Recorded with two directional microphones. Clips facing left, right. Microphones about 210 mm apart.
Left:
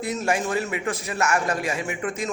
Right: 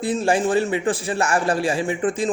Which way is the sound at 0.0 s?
30° right (ahead or behind).